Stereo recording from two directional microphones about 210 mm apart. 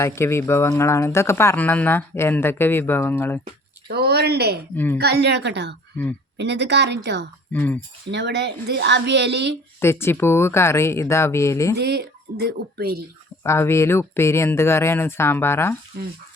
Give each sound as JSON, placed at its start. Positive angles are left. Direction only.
{"t": 0.0, "sound": "speech", "side_deg": 10}
{"t": 3.8, "sound": "speech", "side_deg": -50}
{"t": 7.5, "sound": "speech", "side_deg": 5}
{"t": 8.1, "sound": "a woman's voice", "side_deg": -55}
{"t": 9.8, "sound": "speech", "side_deg": 10}
{"t": 11.8, "sound": "speech", "side_deg": -50}
{"t": 13.4, "sound": "speech", "side_deg": 10}